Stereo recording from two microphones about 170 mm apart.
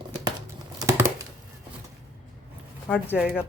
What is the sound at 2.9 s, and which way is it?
Speech, 10° left (ahead or behind).